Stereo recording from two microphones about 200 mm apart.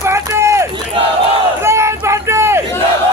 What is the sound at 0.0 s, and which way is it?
Run, 15° right (ahead or behind).